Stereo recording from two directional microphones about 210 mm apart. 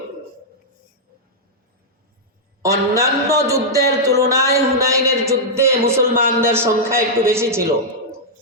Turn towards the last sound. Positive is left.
turn(degrees=-10)  # may be behind; listen again after turning